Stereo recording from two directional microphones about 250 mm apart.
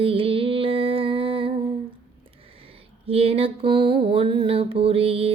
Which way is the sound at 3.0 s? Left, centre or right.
Right.